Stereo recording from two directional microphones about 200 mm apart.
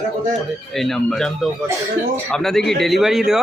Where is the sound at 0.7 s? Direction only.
Centre (ahead or behind).